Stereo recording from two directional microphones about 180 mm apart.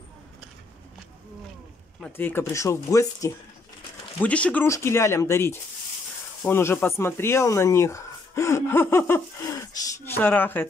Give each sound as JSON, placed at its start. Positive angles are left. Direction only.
{"t": 2.1, "sound": "speech", "side_deg": 10}
{"t": 4.2, "sound": "speech", "side_deg": 5}